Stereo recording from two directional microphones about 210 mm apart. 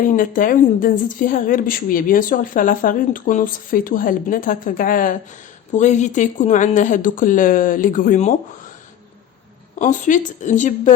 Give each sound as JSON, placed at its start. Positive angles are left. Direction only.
{"t": 0.1, "sound": "a woman's voice", "side_deg": 40}
{"t": 9.7, "sound": "a woman's voice", "side_deg": 35}